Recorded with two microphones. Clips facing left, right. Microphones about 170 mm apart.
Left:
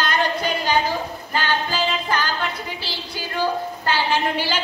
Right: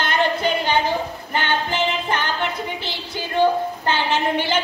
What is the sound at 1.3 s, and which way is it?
Music, 25° right (ahead or behind).